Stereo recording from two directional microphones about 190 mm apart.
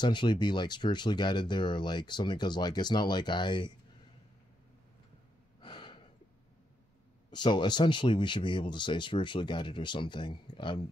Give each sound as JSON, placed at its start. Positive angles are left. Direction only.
{"t": 0.0, "sound": "speech", "side_deg": 25}
{"t": 5.6, "sound": "gasp", "side_deg": 25}
{"t": 7.2, "sound": "speech", "side_deg": 25}